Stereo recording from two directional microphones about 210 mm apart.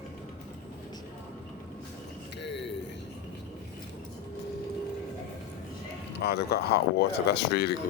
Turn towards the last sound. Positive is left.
turn(degrees=50)  # may be behind; listen again after turning